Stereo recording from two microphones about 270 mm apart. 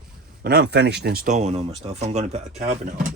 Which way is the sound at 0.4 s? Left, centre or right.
Right.